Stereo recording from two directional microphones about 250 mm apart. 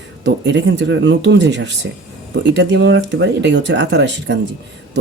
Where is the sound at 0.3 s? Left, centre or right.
Right.